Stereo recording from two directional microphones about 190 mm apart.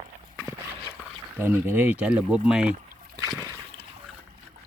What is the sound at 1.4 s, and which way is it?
Speech, 10° right (ahead or behind).